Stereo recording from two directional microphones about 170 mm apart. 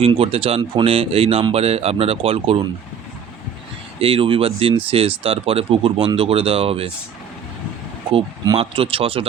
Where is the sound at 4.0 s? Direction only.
35° right (ahead or behind).